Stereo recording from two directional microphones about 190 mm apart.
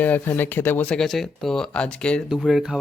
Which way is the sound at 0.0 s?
10° left (ahead or behind).